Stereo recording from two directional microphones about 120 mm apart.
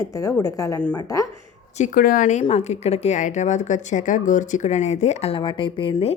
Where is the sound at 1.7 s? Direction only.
85° left.